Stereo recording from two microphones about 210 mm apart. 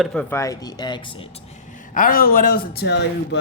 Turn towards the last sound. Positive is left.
turn(degrees=55)  # may be behind; listen again after turning